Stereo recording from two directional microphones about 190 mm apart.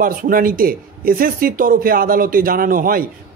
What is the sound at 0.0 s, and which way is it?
A man's voice, 50° right (ahead or behind).